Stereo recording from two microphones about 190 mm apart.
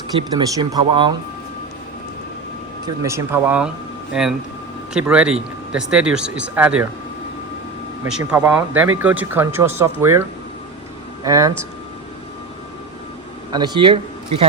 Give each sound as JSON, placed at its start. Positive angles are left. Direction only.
{"t": 0.2, "sound": "speech", "side_deg": -20}
{"t": 2.8, "sound": "speech", "side_deg": -15}
{"t": 8.2, "sound": "speech", "side_deg": -10}
{"t": 13.5, "sound": "speech", "side_deg": -25}